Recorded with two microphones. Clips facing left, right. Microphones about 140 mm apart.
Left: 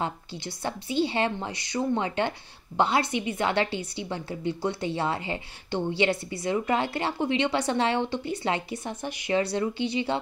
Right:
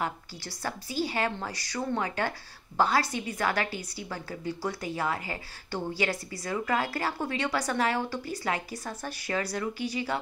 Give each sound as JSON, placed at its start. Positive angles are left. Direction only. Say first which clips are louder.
{"t": 0.0, "sound": "a woman's voice", "louder": "left 2 dB", "side_deg": 25}